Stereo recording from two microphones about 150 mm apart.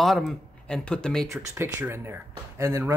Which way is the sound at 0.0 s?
Centre (ahead or behind).